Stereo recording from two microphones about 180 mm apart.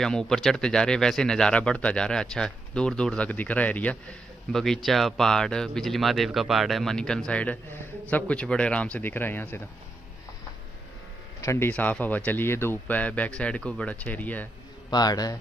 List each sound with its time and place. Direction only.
0.0 s speech: 5° left (ahead or behind)
11.4 s speech: 15° left (ahead or behind)
14.9 s a man's voice: 20° left (ahead or behind)